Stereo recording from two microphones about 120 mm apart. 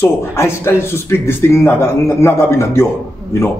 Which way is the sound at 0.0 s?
20° left (ahead or behind).